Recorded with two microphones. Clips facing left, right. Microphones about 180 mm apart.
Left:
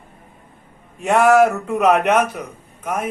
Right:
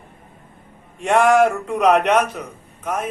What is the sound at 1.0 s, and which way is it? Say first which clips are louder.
Speech: left 1 dB; 5° left (ahead or behind).